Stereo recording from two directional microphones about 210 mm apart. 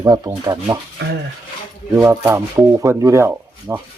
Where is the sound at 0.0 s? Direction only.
15° right (ahead or behind).